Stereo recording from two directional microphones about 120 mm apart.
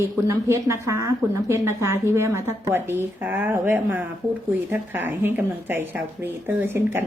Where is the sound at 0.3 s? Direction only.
25° right (ahead or behind).